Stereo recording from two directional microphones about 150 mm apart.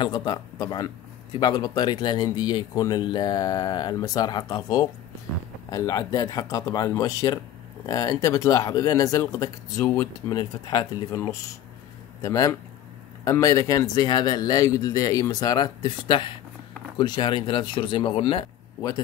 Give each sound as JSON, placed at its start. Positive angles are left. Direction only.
{"t": 0.0, "sound": "speech", "side_deg": 30}
{"t": 10.3, "sound": "speech", "side_deg": 25}